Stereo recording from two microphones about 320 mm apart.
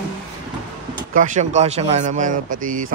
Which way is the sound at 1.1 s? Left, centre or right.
Right.